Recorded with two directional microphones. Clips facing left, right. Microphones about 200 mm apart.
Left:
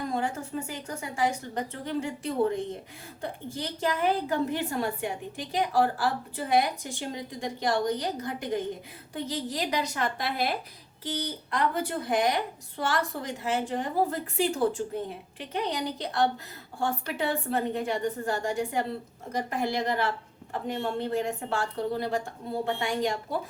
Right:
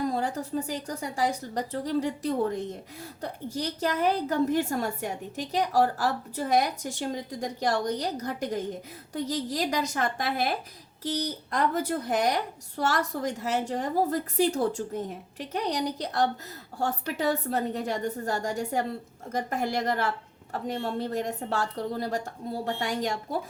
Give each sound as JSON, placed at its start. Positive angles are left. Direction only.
{"t": 0.1, "sound": "a woman's voice", "side_deg": -35}